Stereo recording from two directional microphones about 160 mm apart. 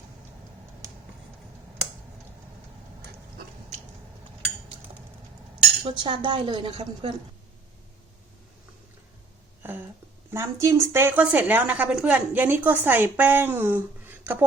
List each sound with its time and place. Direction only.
5.8 s a woman's voice: 30° right (ahead or behind)
10.3 s a woman's voice: 15° right (ahead or behind)